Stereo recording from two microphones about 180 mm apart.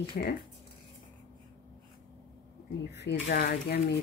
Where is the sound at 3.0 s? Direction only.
70° left (ahead or behind).